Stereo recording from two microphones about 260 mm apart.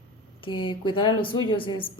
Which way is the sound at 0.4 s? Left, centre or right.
Centre.